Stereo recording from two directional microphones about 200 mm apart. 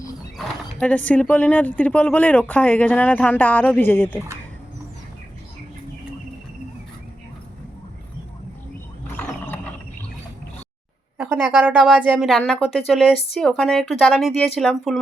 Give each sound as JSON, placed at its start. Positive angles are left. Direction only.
{"t": 0.3, "sound": "speech", "side_deg": 5}
{"t": 9.2, "sound": "ratchet", "side_deg": 10}
{"t": 11.2, "sound": "a woman's voice", "side_deg": -10}